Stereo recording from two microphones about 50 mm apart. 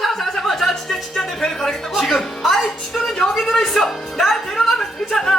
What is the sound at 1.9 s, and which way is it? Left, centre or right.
Speech, centre.